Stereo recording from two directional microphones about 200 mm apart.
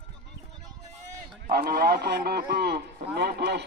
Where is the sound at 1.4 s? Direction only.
45° right (ahead or behind).